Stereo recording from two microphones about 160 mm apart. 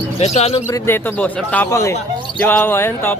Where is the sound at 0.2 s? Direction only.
40° left (ahead or behind).